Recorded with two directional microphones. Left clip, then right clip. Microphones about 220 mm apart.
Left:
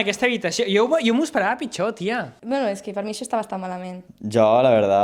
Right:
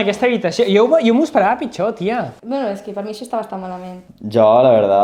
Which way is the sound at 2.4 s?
80° left.